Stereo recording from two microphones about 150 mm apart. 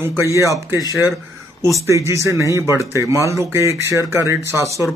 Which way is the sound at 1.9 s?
20° right (ahead or behind).